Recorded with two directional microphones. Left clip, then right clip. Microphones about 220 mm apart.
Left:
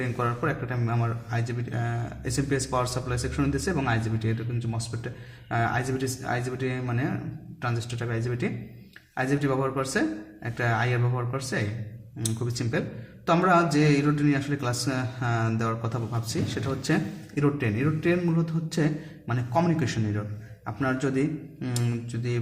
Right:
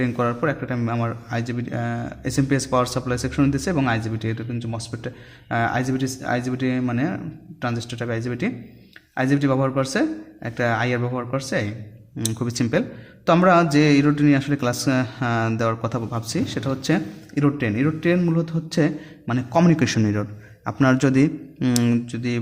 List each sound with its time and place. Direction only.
0.0 s a man's voice: 40° right (ahead or behind)